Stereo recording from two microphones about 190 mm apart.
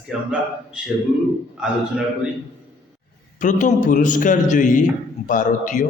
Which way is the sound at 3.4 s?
40° left (ahead or behind).